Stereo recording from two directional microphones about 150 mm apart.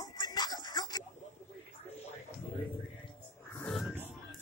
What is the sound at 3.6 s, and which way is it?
Music, centre (ahead or behind).